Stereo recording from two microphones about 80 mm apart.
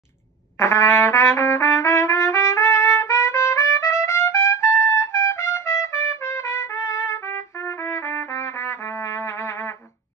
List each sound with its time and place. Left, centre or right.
0.6 s trumpet: left